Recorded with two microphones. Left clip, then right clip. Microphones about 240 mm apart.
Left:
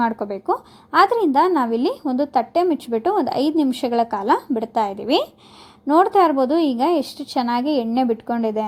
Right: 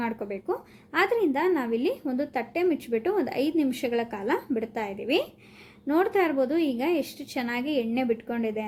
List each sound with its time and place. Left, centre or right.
0.0 s a woman's voice: left